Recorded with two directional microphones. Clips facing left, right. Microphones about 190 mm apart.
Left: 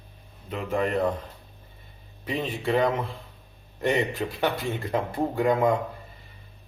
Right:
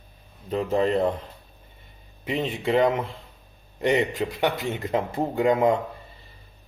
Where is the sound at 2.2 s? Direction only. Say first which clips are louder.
Right 2 dB; 20° right (ahead or behind).